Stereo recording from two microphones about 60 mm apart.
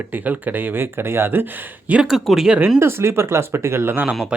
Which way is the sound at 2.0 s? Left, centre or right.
Centre.